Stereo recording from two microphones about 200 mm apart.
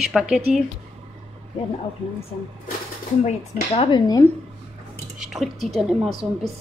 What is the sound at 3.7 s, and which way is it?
Speech, 25° left (ahead or behind).